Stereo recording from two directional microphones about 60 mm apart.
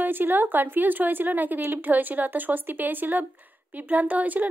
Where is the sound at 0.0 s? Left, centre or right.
Right.